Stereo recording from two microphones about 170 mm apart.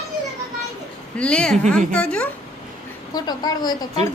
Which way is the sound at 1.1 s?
5° left (ahead or behind).